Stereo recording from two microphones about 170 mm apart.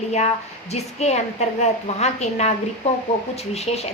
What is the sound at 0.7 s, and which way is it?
A woman's voice, 40° left (ahead or behind).